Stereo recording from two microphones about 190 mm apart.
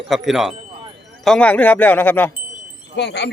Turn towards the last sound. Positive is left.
turn(degrees=60)  # may be behind; listen again after turning